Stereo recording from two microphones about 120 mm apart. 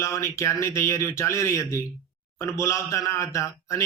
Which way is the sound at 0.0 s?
25° left (ahead or behind).